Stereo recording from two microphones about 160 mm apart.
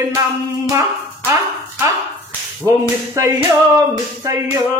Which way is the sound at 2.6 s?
20° right (ahead or behind).